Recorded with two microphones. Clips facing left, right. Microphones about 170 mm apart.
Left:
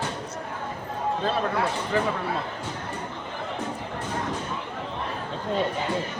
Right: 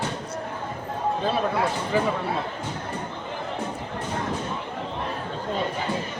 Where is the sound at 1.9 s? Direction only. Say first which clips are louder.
Right 1 dB; 5° right (ahead or behind).